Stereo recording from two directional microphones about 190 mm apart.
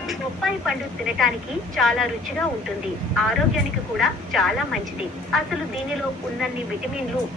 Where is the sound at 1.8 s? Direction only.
Centre (ahead or behind).